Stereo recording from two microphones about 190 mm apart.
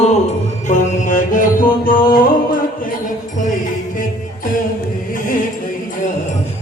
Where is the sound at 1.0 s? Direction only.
40° left (ahead or behind).